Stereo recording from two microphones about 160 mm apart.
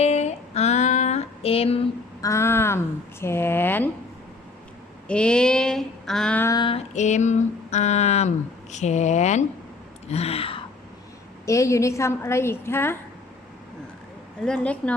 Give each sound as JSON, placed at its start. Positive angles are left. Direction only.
{"t": 0.0, "sound": "female singing", "side_deg": 45}
{"t": 2.2, "sound": "speech", "side_deg": 15}
{"t": 5.0, "sound": "speech", "side_deg": 5}
{"t": 6.5, "sound": "a sound", "side_deg": 30}
{"t": 11.4, "sound": "speech", "side_deg": 20}
{"t": 14.4, "sound": "speech", "side_deg": 5}